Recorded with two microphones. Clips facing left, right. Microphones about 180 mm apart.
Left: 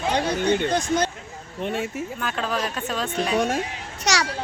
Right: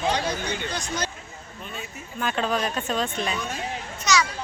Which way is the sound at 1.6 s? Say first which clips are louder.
Left 12 dB; 80° left.